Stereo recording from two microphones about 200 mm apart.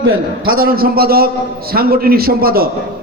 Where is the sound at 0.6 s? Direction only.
45° right (ahead or behind).